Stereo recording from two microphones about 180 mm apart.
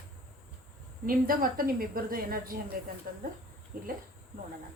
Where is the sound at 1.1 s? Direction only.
50° right (ahead or behind).